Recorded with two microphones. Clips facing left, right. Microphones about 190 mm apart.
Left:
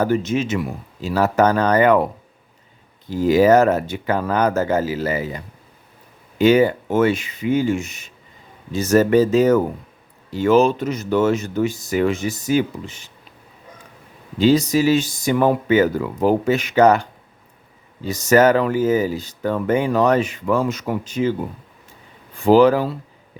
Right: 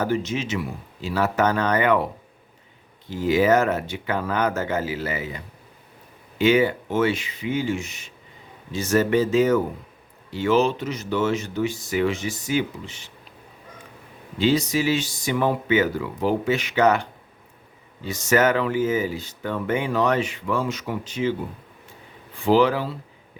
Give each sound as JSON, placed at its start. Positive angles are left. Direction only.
{"t": 0.0, "sound": "speech", "side_deg": 50}
{"t": 3.1, "sound": "speech", "side_deg": 40}
{"t": 6.4, "sound": "speech", "side_deg": 40}
{"t": 14.3, "sound": "speech", "side_deg": 40}
{"t": 22.4, "sound": "speech", "side_deg": 45}